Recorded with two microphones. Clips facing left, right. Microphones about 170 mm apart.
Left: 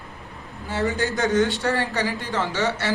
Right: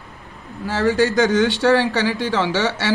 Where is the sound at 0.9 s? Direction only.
85° right.